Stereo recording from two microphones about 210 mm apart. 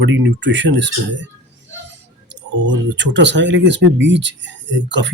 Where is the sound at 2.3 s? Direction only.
55° right (ahead or behind).